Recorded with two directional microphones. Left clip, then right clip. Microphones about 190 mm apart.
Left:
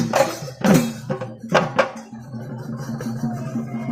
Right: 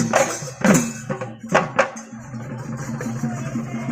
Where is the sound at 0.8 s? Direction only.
40° left (ahead or behind).